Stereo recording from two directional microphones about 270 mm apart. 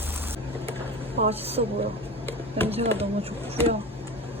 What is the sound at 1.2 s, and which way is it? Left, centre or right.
Speech, right.